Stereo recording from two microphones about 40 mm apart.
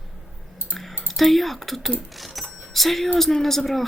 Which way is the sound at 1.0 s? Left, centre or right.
Centre.